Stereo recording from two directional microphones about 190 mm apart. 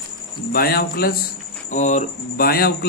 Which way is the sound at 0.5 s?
50° left (ahead or behind).